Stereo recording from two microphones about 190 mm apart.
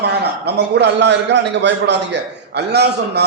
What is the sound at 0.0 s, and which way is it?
A man's voice, 60° right (ahead or behind).